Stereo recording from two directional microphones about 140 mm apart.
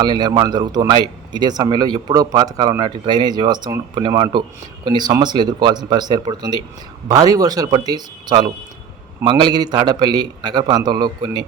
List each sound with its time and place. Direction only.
0.0 s speech: 30° right (ahead or behind)